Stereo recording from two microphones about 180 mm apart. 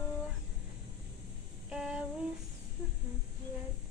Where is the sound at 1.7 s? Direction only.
5° right (ahead or behind).